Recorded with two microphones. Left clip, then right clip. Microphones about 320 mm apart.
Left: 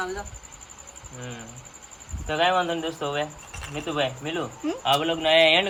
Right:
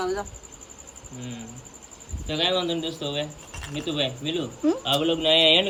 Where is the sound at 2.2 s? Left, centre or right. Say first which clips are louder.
Left 2 dB; centre.